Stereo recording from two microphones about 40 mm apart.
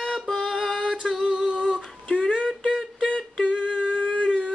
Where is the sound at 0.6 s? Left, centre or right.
Left.